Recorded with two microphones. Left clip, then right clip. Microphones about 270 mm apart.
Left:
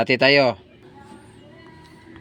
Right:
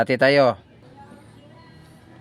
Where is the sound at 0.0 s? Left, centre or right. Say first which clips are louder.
Even; centre.